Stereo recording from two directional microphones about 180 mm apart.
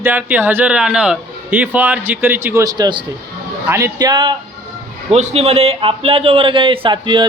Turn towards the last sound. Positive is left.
turn(degrees=-25)  # may be behind; listen again after turning